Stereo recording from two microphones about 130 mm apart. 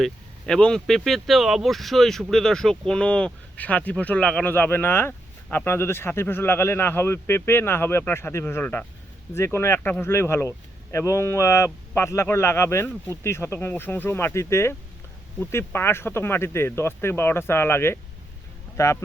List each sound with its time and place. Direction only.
0.0 s speech: 5° left (ahead or behind); by 19.0 s 20° left (ahead or behind)